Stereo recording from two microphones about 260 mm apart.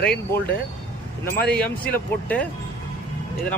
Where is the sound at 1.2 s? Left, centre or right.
Left.